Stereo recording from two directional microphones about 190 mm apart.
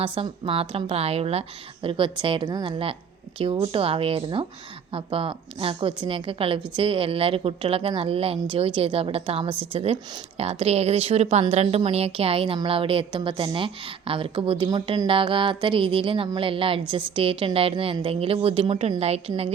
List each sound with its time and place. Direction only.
0.0 s a woman's voice: 30° right (ahead or behind)